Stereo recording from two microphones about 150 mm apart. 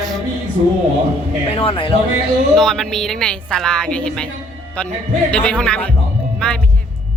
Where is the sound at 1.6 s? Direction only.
35° left (ahead or behind).